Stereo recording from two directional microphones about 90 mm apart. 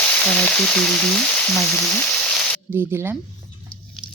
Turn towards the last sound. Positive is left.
turn(degrees=-25)  # may be behind; listen again after turning